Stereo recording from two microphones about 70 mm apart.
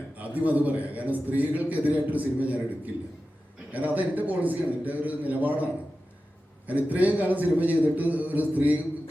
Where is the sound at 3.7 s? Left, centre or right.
Right.